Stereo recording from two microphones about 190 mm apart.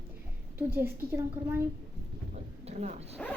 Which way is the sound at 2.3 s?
35° right (ahead or behind).